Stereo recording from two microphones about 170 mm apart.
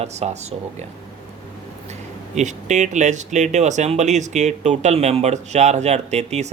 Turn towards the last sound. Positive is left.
turn(degrees=-40)  # may be behind; listen again after turning